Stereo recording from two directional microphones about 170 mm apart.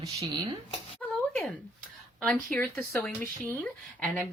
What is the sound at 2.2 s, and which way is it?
A woman's voice, 10° left (ahead or behind).